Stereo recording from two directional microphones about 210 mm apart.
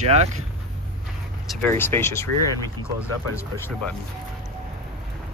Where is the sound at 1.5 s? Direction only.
5° left (ahead or behind).